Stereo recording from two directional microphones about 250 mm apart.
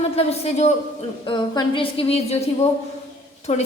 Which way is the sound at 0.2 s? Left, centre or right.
Left.